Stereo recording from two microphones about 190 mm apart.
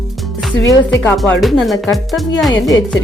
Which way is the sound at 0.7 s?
20° left (ahead or behind).